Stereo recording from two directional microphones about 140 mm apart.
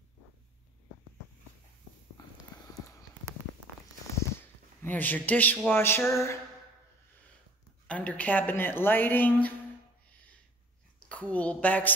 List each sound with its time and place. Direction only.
4.4 s a sound: 15° left (ahead or behind)
5.7 s a woman's voice: 15° left (ahead or behind)
7.8 s a woman's voice: 10° left (ahead or behind)
11.0 s a woman's voice: 10° left (ahead or behind)